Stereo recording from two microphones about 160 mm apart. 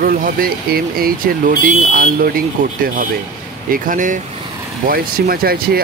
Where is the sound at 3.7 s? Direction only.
55° right (ahead or behind).